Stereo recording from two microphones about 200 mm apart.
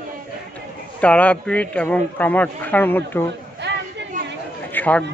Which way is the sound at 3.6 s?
60° right (ahead or behind).